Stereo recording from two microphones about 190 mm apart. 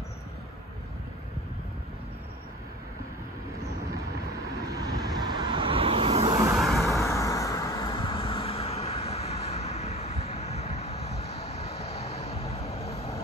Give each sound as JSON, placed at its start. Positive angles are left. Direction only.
{"t": 4.7, "sound": "vehicle", "side_deg": -20}
{"t": 6.5, "sound": "vehicle", "side_deg": 0}
{"t": 6.9, "sound": "vehicle", "side_deg": 15}